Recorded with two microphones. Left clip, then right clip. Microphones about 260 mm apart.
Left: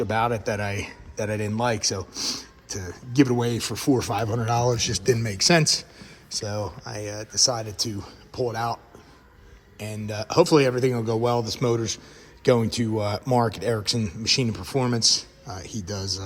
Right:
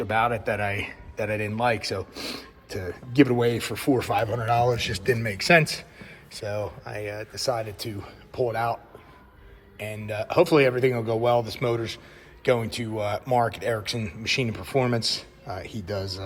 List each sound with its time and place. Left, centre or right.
0.0 s speech: centre